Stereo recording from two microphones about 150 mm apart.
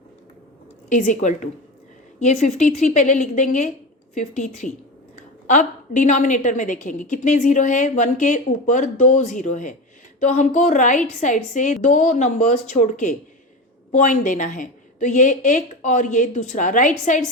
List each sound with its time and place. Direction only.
0.9 s a woman's voice: 55° left (ahead or behind)